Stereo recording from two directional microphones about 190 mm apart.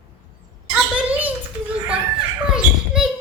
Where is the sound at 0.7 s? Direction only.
5° right (ahead or behind).